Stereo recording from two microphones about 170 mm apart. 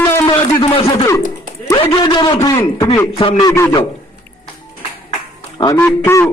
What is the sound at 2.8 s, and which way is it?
Speech, 30° left (ahead or behind).